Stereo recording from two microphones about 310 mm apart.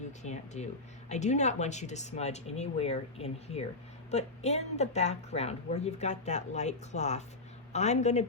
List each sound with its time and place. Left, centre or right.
0.2 s a woman's voice: left